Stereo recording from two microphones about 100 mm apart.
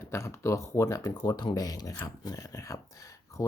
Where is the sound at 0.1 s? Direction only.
30° left (ahead or behind).